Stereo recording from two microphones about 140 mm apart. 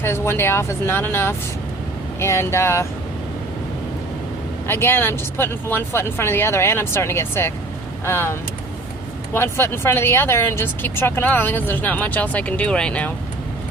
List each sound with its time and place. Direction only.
0.0 s speech: 15° left (ahead or behind)
4.6 s speech: 15° left (ahead or behind)